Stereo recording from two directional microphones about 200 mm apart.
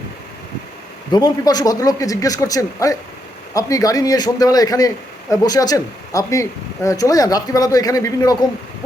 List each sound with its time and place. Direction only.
1.1 s speech: 20° left (ahead or behind)